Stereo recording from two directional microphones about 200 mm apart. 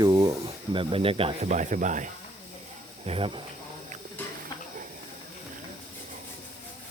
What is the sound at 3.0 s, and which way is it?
Speech, 30° right (ahead or behind).